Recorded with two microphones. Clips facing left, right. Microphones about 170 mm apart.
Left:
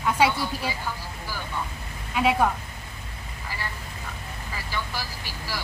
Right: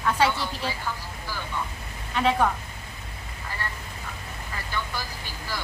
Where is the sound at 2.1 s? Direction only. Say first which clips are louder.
Left 1 dB; 10° left (ahead or behind).